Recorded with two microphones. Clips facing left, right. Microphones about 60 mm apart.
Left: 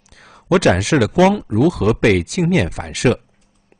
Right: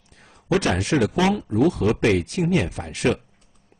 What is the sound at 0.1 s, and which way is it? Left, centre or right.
Speech, left.